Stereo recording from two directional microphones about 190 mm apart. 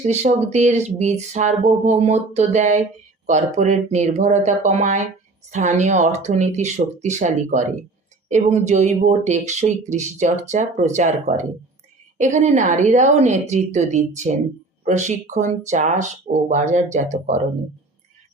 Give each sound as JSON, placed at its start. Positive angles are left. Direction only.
{"t": 0.0, "sound": "speech", "side_deg": -40}